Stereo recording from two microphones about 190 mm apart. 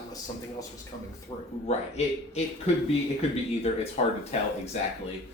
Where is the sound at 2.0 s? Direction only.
35° left (ahead or behind).